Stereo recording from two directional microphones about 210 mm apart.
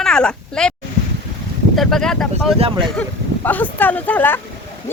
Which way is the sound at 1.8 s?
Centre (ahead or behind).